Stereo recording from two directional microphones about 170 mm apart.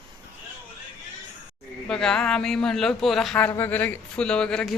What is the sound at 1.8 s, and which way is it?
Speech, 5° left (ahead or behind).